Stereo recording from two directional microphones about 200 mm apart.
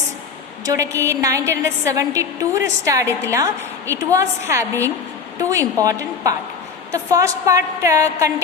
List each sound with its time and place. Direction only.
0.6 s a woman's voice: 15° right (ahead or behind)